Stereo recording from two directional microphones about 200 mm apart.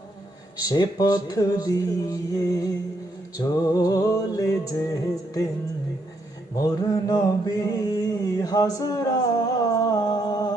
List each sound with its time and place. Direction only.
0.6 s music: 20° left (ahead or behind)
6.6 s mantra: 20° left (ahead or behind)